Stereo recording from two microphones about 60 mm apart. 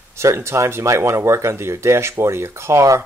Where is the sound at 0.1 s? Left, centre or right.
Right.